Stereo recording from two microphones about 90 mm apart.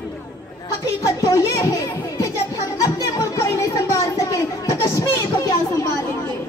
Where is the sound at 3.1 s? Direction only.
35° left (ahead or behind).